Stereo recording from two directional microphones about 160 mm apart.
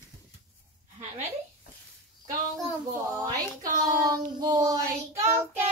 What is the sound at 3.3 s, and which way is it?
Child singing, 20° right (ahead or behind).